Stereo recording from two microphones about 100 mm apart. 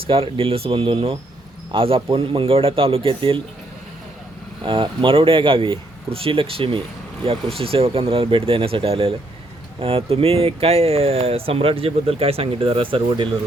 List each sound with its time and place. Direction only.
0.0 s speech: 65° right (ahead or behind)
4.6 s speech: 55° right (ahead or behind)